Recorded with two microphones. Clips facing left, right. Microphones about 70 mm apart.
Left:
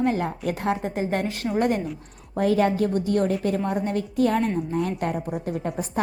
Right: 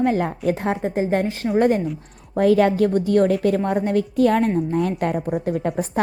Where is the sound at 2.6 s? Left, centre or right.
Right.